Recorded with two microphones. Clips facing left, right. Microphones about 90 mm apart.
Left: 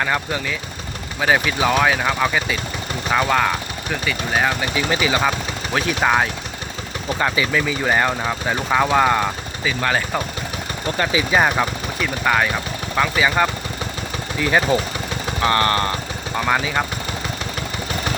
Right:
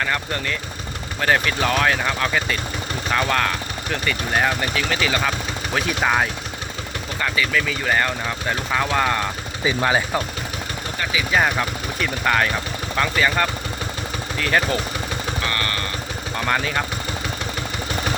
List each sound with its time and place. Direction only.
0.0 s speech: 10° left (ahead or behind)
4.7 s speech: 15° left (ahead or behind)
5.7 s speech: centre (ahead or behind)
7.2 s speech: 20° left (ahead or behind)
9.8 s speech: 10° right (ahead or behind)
11.3 s speech: 15° left (ahead or behind)
15.4 s vehicle: 30° left (ahead or behind)
16.4 s speech: 5° left (ahead or behind)